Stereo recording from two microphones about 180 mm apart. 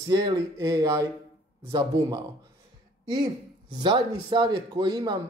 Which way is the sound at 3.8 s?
25° right (ahead or behind).